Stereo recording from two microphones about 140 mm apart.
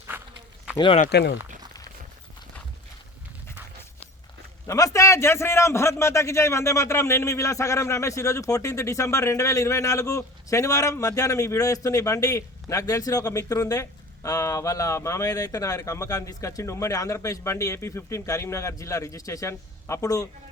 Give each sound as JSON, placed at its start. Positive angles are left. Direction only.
{"t": 4.6, "sound": "a man's voice", "side_deg": 25}